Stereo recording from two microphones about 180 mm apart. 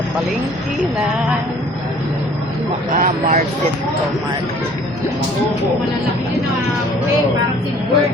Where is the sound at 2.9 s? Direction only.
45° right (ahead or behind).